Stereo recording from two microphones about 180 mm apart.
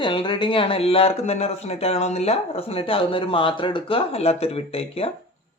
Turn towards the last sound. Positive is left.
turn(degrees=30)  # may be behind; listen again after turning